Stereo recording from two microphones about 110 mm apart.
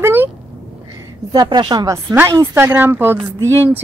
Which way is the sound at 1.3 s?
40° right (ahead or behind).